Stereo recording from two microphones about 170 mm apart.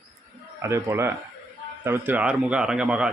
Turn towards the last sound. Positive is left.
turn(degrees=-5)  # may be behind; listen again after turning